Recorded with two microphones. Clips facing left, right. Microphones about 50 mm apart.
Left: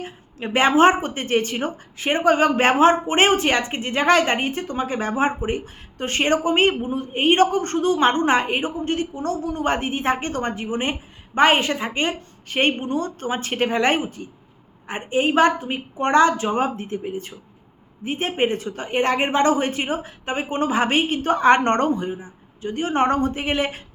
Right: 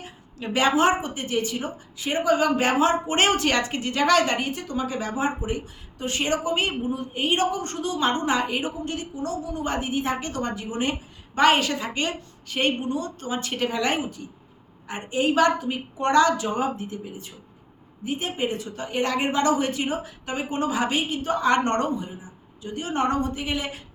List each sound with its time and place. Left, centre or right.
0.0 s a woman's voice: left